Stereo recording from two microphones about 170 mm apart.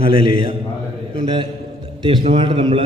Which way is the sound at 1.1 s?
30° right (ahead or behind).